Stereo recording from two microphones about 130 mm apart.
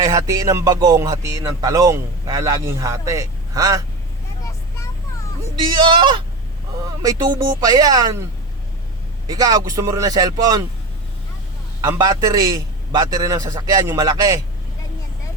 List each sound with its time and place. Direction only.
0.0 s speech: 30° right (ahead or behind)
5.5 s speech: 35° right (ahead or behind)
9.2 s speech: 30° right (ahead or behind)
11.8 s speech: 25° right (ahead or behind)